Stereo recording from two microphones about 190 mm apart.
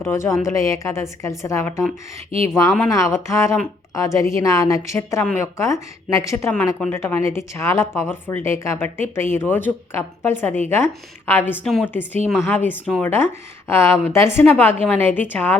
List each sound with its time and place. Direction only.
0.0 s speech: 15° left (ahead or behind)
2.9 s a woman's voice: 15° left (ahead or behind)
7.0 s speech: 15° left (ahead or behind)